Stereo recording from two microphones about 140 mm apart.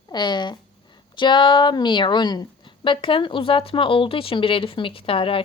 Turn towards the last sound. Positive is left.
turn(degrees=40)  # may be behind; listen again after turning